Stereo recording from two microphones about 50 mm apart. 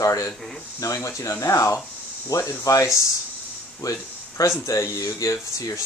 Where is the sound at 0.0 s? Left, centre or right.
Left.